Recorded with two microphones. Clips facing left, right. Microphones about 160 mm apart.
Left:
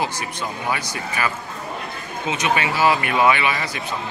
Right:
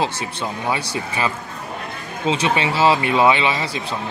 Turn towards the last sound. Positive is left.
turn(degrees=-25)  # may be behind; listen again after turning